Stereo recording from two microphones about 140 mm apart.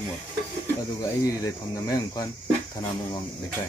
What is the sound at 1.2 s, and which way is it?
Speech, 25° left (ahead or behind).